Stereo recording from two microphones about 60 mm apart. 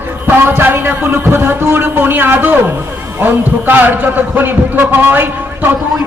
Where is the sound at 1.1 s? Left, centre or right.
Right.